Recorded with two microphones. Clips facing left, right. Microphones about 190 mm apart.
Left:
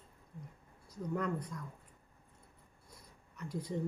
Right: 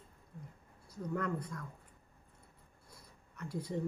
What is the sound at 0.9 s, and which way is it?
Speech, 20° left (ahead or behind).